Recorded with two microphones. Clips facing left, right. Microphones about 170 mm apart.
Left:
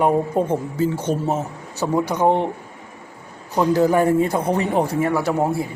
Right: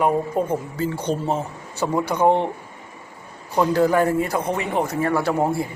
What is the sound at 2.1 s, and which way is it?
Speech, 15° left (ahead or behind).